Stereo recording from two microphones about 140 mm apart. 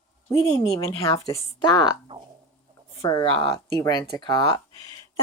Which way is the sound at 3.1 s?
30° left (ahead or behind).